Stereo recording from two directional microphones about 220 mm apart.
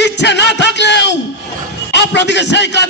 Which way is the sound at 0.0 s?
50° left (ahead or behind).